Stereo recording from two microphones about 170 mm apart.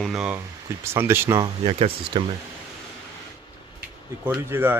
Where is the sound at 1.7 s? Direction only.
35° right (ahead or behind).